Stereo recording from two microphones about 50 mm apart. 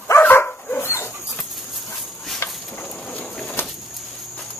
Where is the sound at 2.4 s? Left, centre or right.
Left.